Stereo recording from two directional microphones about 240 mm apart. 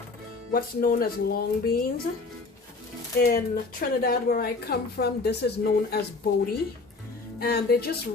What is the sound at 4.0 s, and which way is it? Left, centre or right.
A woman's voice, left.